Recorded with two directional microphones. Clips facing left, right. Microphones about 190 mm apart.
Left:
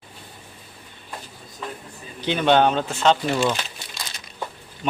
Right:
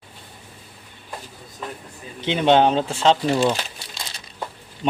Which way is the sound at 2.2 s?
25° right (ahead or behind).